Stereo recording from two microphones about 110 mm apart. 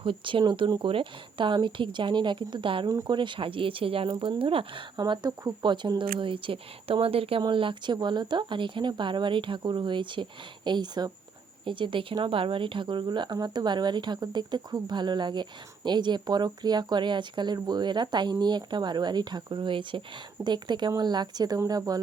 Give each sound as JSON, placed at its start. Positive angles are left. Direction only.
{"t": 0.0, "sound": "speech", "side_deg": -50}
{"t": 2.9, "sound": "speech", "side_deg": -30}
{"t": 3.2, "sound": "speech", "side_deg": -50}
{"t": 4.9, "sound": "speech", "side_deg": -45}